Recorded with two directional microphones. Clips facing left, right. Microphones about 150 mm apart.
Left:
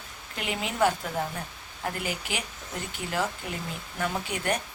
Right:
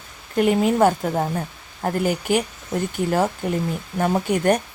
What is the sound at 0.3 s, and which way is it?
Speech, 45° right (ahead or behind).